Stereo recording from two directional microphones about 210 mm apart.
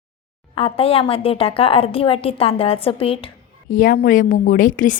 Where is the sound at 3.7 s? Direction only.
40° left (ahead or behind).